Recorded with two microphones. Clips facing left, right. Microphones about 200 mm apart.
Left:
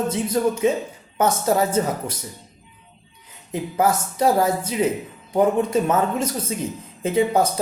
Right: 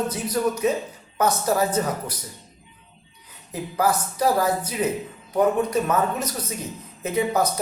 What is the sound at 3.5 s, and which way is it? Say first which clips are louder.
Speech: left 2 dB; 25° left (ahead or behind).